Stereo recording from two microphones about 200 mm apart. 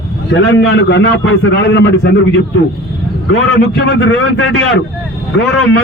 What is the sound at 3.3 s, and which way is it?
A man's voice, 60° left (ahead or behind).